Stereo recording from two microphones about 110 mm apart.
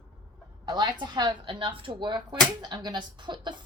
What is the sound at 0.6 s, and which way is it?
A woman's voice, 40° right (ahead or behind).